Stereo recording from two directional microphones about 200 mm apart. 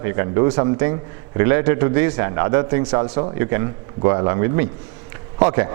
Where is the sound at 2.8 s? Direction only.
25° right (ahead or behind).